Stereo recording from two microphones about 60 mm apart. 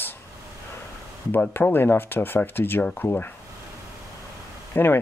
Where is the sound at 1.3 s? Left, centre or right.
Left.